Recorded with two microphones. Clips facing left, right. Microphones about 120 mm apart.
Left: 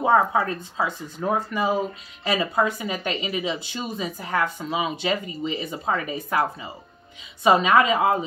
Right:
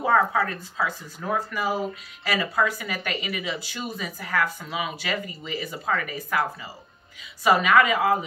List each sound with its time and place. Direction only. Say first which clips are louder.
0.0 s speech: left 2 dB; 25° left (ahead or behind)